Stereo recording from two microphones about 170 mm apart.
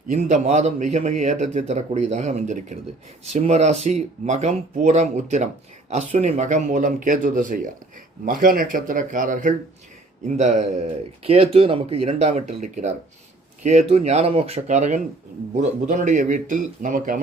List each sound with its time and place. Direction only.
0.1 s speech: 45° right (ahead or behind)